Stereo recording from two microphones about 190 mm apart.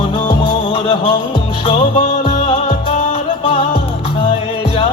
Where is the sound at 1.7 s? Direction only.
40° left (ahead or behind).